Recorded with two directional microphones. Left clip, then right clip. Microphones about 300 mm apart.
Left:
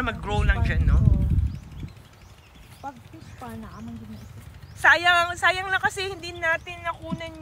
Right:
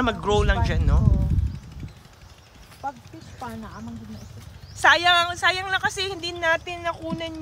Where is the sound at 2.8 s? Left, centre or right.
Right.